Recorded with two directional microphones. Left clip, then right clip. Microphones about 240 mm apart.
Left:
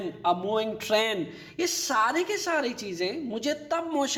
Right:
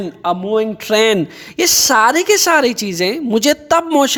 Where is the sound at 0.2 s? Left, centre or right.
Right.